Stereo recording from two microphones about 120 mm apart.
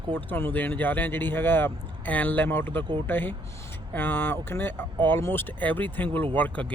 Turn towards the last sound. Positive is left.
turn(degrees=15)  # may be behind; listen again after turning